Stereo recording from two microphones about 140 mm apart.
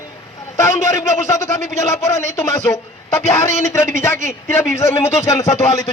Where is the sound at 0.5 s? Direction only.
20° left (ahead or behind).